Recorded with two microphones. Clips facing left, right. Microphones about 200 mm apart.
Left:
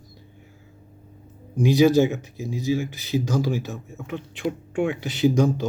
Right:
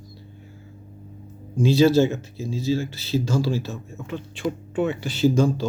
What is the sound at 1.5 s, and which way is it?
Speech, 15° left (ahead or behind).